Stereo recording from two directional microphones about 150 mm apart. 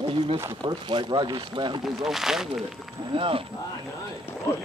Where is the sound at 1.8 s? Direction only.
Centre (ahead or behind).